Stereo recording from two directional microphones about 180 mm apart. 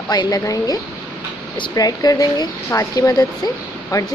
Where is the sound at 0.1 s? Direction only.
20° left (ahead or behind).